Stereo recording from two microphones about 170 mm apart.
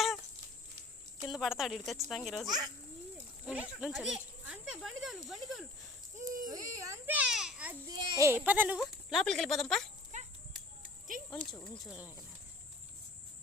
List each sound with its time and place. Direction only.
1.2 s speech: 5° right (ahead or behind)
2.5 s a child's voice: 25° right (ahead or behind)
3.4 s speech: 5° right (ahead or behind)
6.1 s speech: 50° right (ahead or behind)
6.7 s a sound: 20° right (ahead or behind)
7.9 s speech: 15° right (ahead or behind); by 9.9 s centre (ahead or behind)
10.1 s a sound: 45° right (ahead or behind)
11.3 s speech: 10° left (ahead or behind)